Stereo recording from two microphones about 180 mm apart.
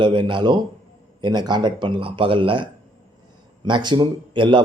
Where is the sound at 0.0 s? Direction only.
25° right (ahead or behind).